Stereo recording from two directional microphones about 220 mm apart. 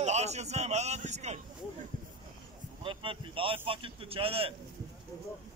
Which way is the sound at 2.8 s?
25° right (ahead or behind).